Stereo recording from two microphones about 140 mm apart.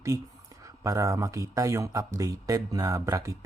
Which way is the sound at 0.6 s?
25° right (ahead or behind).